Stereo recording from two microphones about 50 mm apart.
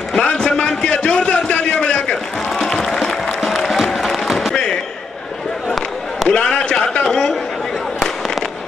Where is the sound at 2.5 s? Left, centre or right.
Centre.